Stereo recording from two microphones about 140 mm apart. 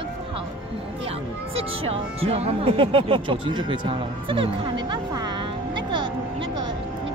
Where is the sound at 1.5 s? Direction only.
40° right (ahead or behind).